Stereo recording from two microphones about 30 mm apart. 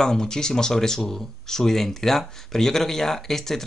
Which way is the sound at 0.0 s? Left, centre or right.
Left.